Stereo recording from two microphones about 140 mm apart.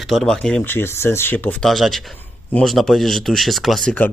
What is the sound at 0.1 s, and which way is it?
Speech, 5° left (ahead or behind).